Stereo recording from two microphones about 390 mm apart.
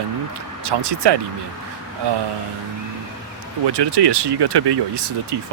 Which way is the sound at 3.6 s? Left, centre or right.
Right.